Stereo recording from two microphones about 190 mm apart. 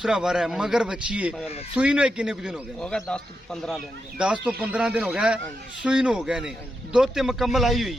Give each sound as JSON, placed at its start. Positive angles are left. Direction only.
{"t": 0.0, "sound": "a man's voice", "side_deg": 0}